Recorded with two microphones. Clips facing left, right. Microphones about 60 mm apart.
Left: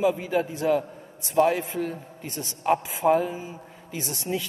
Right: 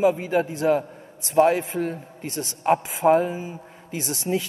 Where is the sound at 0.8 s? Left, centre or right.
Right.